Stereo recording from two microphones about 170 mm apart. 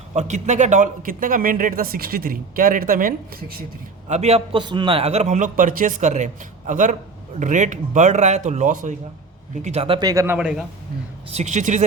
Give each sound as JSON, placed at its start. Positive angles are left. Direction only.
{"t": 0.1, "sound": "speech", "side_deg": -45}
{"t": 4.1, "sound": "a man's voice", "side_deg": -40}
{"t": 10.1, "sound": "a man's voice", "side_deg": -20}
{"t": 10.3, "sound": "a man's voice", "side_deg": -5}
{"t": 11.3, "sound": "a man's voice", "side_deg": -40}